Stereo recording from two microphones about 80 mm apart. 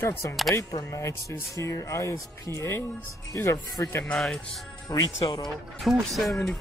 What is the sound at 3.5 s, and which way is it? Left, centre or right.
Speech, left.